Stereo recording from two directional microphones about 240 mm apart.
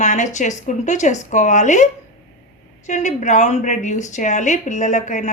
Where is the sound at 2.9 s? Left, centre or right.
Left.